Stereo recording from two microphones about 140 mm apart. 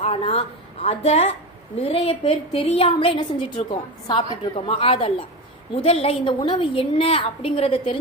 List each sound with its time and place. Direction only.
0.0 s a woman's voice: 45° left (ahead or behind)